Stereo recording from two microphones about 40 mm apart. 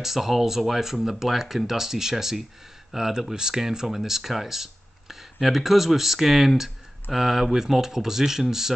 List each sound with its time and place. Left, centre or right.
0.0 s speech: centre